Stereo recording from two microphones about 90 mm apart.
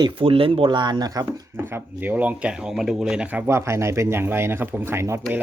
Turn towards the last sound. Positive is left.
turn(degrees=-30)  # may be behind; listen again after turning